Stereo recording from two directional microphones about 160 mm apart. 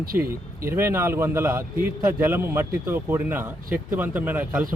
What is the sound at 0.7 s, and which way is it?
A man's voice, 15° right (ahead or behind).